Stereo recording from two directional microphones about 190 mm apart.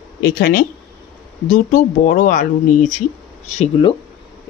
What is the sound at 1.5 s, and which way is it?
Speech, 40° left (ahead or behind).